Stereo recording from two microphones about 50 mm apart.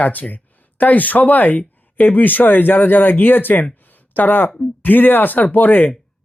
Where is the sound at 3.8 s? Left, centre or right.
Left.